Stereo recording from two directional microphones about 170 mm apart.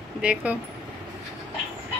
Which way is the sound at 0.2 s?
5° right (ahead or behind).